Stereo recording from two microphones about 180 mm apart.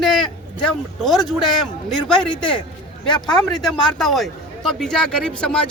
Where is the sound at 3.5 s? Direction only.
Centre (ahead or behind).